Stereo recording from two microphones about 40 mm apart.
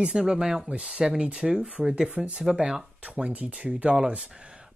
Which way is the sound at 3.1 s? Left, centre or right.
Right.